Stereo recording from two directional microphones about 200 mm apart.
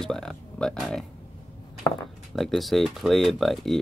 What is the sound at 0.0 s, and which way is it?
Speech, centre (ahead or behind).